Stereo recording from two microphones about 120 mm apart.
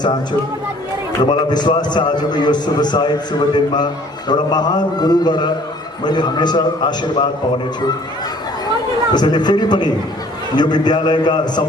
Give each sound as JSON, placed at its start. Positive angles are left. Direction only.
{"t": 1.2, "sound": "a man's voice", "side_deg": 35}
{"t": 9.1, "sound": "a man's voice", "side_deg": 35}